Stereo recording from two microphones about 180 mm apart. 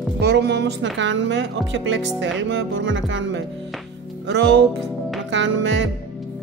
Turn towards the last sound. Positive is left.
turn(degrees=-90)